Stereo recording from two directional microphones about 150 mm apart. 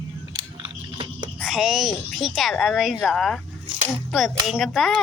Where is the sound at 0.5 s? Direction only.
30° right (ahead or behind).